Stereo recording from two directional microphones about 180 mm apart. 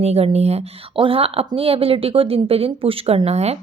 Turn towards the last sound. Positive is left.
turn(degrees=-35)  # may be behind; listen again after turning